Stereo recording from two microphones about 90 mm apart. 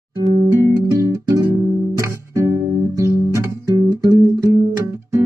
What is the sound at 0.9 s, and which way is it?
Music, 40° right (ahead or behind).